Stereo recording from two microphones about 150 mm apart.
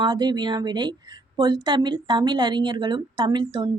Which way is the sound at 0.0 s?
30° right (ahead or behind).